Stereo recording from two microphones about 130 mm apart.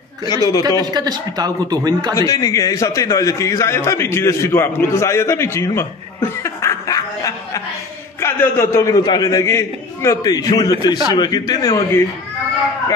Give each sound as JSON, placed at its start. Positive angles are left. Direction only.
{"t": 0.2, "sound": "a man's voice", "side_deg": 30}
{"t": 0.9, "sound": "speech", "side_deg": -30}
{"t": 2.1, "sound": "a man's voice", "side_deg": 25}
{"t": 6.4, "sound": "snicker", "side_deg": 25}
{"t": 8.2, "sound": "a man's voice", "side_deg": 20}